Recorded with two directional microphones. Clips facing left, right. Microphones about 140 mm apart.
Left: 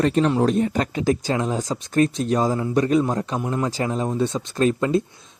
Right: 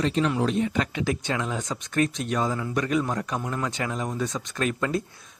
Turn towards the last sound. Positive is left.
turn(degrees=25)  # may be behind; listen again after turning